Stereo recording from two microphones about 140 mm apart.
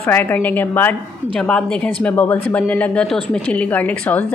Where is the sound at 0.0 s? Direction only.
15° left (ahead or behind).